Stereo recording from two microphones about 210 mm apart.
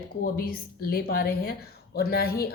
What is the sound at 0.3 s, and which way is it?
Speech, 45° left (ahead or behind).